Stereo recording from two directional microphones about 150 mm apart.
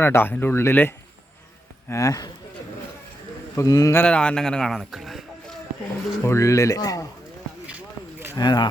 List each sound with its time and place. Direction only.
0.0 s speech: 15° left (ahead or behind)
3.5 s speech: 20° left (ahead or behind)
4.0 s a man's voice: 5° left (ahead or behind)
6.2 s speech: 20° left (ahead or behind)
7.7 s a sound: 10° right (ahead or behind)
8.4 s speech: 30° left (ahead or behind)